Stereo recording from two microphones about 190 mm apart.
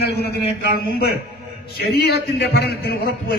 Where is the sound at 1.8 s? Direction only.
55° left (ahead or behind).